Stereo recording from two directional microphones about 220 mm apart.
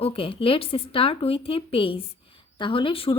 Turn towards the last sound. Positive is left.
turn(degrees=25)  # may be behind; listen again after turning